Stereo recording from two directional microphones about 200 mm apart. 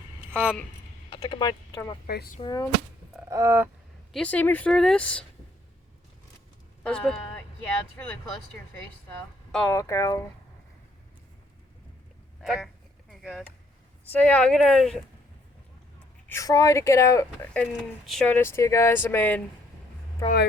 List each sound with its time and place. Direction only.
0.3 s speech: 10° right (ahead or behind)
1.1 s speech: 20° left (ahead or behind)
2.0 s speech: 50° left (ahead or behind)
2.4 s speech: 20° left (ahead or behind)
3.2 s a sound: 15° right (ahead or behind)
4.1 s speech: 5° left (ahead or behind)
6.8 s speech: 5° left (ahead or behind)
8.5 s speech: 10° left (ahead or behind)
12.4 s a sound: centre (ahead or behind)
14.1 s a woman's voice: 5° left (ahead or behind)
16.3 s speech: 15° left (ahead or behind)